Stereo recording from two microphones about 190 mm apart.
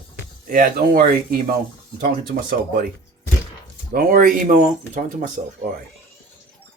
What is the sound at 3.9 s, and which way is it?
Speech, 45° right (ahead or behind).